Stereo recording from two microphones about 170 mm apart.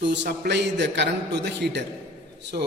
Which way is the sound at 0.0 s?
90° right.